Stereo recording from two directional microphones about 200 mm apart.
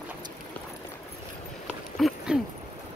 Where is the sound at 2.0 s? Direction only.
Centre (ahead or behind).